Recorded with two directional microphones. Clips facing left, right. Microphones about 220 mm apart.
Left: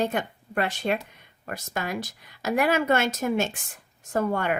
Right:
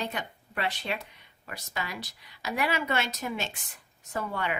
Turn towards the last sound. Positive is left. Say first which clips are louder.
# left 7 dB
turn(degrees=50)  # may be behind; listen again after turning